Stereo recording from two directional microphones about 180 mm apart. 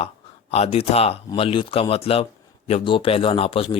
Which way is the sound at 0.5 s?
35° left (ahead or behind).